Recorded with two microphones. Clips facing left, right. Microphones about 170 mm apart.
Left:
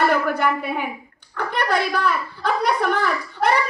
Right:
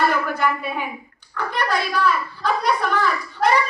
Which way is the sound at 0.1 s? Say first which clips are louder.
Left 2 dB; 55° left (ahead or behind).